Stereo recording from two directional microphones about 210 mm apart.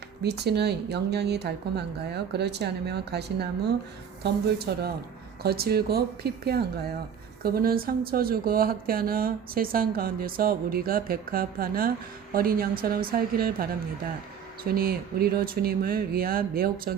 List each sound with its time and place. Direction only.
0.2 s speech: 50° right (ahead or behind)